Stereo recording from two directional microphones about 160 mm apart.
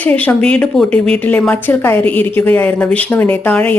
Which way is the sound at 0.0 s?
10° left (ahead or behind).